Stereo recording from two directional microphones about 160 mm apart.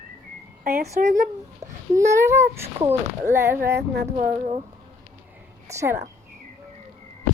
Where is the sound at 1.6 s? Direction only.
20° right (ahead or behind).